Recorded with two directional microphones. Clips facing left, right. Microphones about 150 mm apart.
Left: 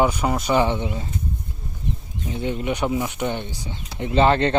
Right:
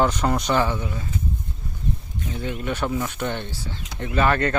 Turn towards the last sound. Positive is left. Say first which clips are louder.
# left 4 dB
turn(degrees=25)  # may be behind; listen again after turning